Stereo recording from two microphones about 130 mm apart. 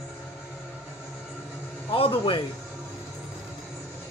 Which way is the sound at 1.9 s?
45° left (ahead or behind).